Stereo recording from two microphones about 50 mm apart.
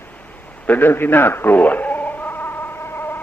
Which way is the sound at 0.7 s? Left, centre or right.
Left.